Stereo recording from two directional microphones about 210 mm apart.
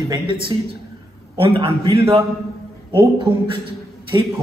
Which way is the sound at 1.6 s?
25° right (ahead or behind).